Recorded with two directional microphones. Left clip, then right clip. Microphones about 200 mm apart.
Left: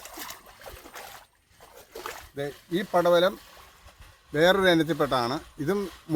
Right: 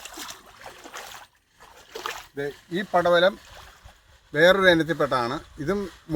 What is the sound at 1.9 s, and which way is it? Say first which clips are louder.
Splash: right 5 dB; 55° right (ahead or behind).